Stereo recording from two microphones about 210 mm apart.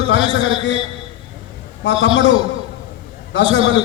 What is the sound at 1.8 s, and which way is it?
Speech, 60° left (ahead or behind).